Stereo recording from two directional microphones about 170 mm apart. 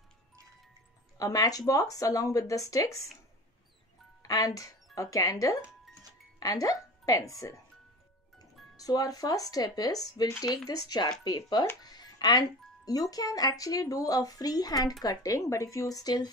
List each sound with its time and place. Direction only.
1.1 s speech: 20° left (ahead or behind)
4.2 s speech: 20° left (ahead or behind)
8.7 s speech: 20° left (ahead or behind)